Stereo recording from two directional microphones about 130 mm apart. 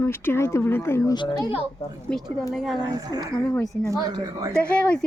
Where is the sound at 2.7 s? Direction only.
30° right (ahead or behind).